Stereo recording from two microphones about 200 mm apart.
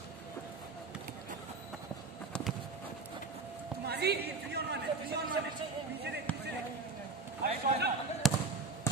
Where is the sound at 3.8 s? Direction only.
55° right (ahead or behind).